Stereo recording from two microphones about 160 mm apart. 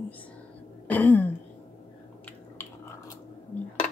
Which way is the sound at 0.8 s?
10° left (ahead or behind).